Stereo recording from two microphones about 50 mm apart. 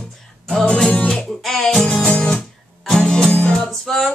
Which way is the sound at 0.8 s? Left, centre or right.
Centre.